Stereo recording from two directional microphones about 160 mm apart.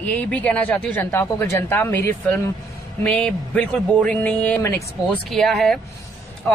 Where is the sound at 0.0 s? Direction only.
10° left (ahead or behind).